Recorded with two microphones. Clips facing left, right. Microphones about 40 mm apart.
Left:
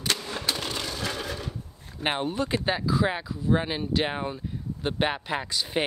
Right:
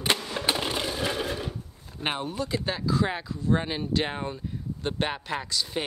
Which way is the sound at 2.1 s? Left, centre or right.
Left.